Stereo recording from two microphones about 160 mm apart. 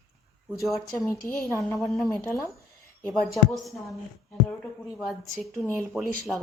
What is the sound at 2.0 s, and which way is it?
Speech, 20° left (ahead or behind).